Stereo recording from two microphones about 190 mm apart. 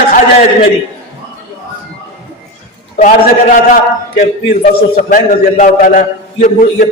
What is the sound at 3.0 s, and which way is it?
A man's voice, 40° left (ahead or behind).